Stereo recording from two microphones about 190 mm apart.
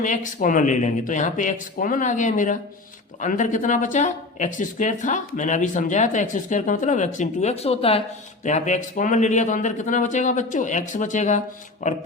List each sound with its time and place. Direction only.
0.0 s speech: 40° left (ahead or behind)